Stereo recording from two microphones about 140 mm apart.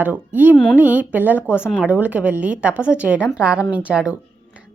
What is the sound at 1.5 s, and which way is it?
Speech, 15° left (ahead or behind).